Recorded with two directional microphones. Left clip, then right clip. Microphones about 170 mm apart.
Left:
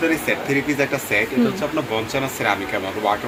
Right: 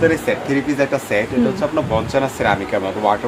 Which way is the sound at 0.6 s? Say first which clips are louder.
Right 3 dB; 75° right (ahead or behind).